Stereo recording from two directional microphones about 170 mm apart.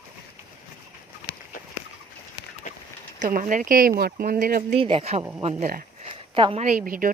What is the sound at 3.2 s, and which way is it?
Speech, 55° right (ahead or behind).